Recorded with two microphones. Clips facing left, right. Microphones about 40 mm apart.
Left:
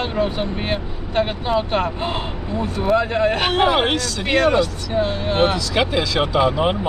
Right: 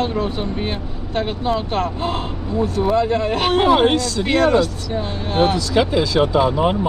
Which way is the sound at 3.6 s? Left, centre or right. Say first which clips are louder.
Right 4 dB; left.